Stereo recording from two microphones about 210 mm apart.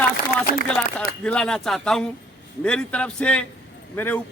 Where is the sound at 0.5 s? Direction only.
40° left (ahead or behind).